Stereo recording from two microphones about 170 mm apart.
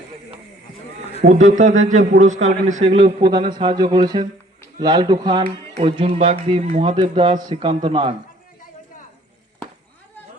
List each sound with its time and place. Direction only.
1.2 s a man's voice: 45° right (ahead or behind)
6.8 s a man's voice: 30° right (ahead or behind)